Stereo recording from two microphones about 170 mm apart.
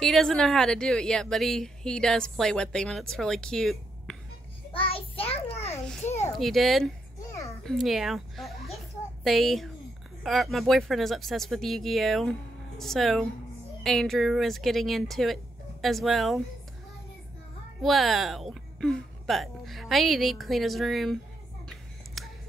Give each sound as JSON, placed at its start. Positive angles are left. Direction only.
{"t": 0.0, "sound": "speech", "side_deg": 0}
{"t": 5.3, "sound": "a child's voice", "side_deg": 35}
{"t": 5.9, "sound": "a child's voice", "side_deg": 10}
{"t": 17.8, "sound": "speech", "side_deg": 0}
{"t": 21.6, "sound": "a sound", "side_deg": 0}